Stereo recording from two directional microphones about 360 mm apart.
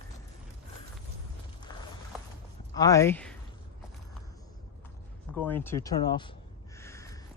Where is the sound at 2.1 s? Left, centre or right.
Centre.